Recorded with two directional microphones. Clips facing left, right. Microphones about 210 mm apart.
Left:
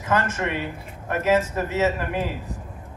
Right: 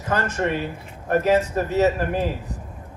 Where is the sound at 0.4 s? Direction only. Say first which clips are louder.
Right 3 dB; 40° right (ahead or behind).